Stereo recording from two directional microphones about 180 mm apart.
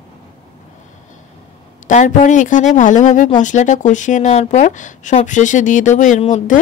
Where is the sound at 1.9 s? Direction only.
45° left (ahead or behind).